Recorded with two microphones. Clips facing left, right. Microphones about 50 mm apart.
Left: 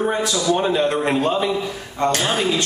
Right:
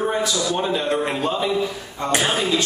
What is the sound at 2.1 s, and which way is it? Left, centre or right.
Speech, centre.